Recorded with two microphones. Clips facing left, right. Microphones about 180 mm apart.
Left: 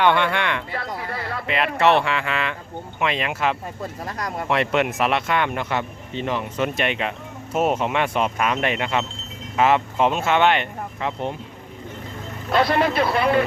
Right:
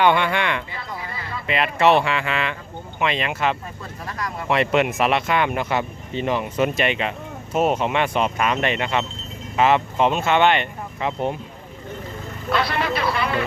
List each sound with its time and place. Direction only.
0.0 s speech: 5° right (ahead or behind)
0.7 s a sound: 65° left (ahead or behind)
1.5 s speech: centre (ahead or behind)
4.0 s speech: 40° left (ahead or behind)
4.4 s speech: centre (ahead or behind)
6.7 s speech: centre (ahead or behind)
12.5 s speech: 45° left (ahead or behind)